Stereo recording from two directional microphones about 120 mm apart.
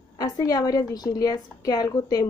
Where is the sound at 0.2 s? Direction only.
30° left (ahead or behind).